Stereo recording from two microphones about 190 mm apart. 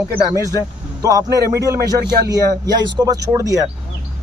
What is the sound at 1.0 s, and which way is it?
Speech, 20° right (ahead or behind).